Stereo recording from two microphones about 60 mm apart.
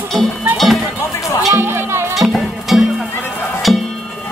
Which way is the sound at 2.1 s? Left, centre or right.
Centre.